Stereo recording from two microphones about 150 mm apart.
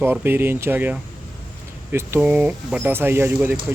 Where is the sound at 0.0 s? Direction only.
15° right (ahead or behind).